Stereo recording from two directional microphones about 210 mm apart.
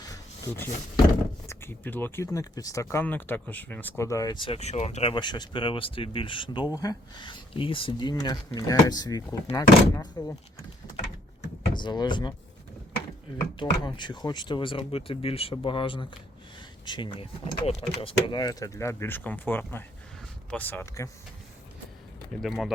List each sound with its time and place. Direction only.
0.0 s a sound: 15° left (ahead or behind)
1.5 s speech: 10° left (ahead or behind)
11.7 s speech: 20° left (ahead or behind)
13.6 s speech: 20° left (ahead or behind)
22.4 s speech: centre (ahead or behind)